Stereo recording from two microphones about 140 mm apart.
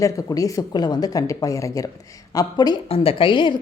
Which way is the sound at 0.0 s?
25° left (ahead or behind).